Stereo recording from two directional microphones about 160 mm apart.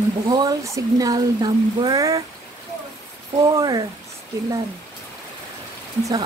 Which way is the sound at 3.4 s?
25° right (ahead or behind).